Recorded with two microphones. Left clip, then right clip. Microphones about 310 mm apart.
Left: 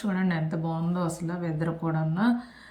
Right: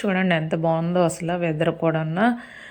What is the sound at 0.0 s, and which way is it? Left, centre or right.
A woman's voice, centre.